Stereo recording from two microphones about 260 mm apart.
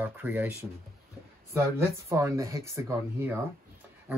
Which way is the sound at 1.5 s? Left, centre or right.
Centre.